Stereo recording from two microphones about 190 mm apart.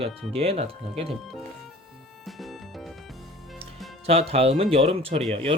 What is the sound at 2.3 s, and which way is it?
Music, centre (ahead or behind).